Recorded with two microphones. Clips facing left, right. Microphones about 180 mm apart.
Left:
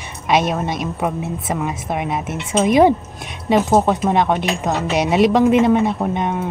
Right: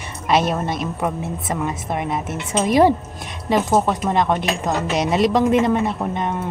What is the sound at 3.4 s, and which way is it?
Speech, 25° left (ahead or behind).